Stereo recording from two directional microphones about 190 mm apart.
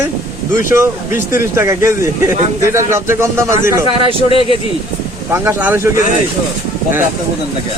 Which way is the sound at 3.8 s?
25° right (ahead or behind).